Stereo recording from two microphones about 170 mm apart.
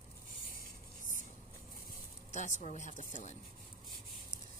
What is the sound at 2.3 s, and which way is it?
Speech, 45° left (ahead or behind).